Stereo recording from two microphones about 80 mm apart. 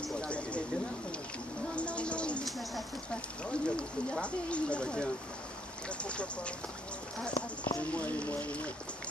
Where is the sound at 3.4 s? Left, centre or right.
Centre.